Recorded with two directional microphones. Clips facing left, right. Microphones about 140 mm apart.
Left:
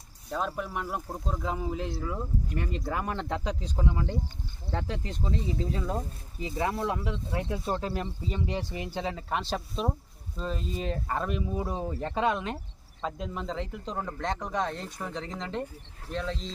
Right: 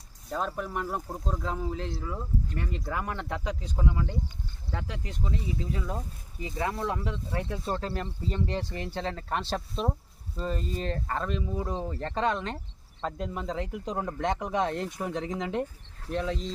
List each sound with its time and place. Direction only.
0.3 s speech: centre (ahead or behind); by 6.7 s 25° left (ahead or behind)
6.7 s speech: 15° left (ahead or behind); by 16.5 s 5° right (ahead or behind)